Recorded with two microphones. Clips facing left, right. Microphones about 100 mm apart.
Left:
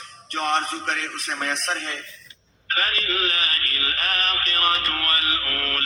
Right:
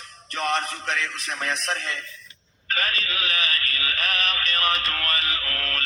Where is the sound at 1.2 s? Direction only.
50° left (ahead or behind).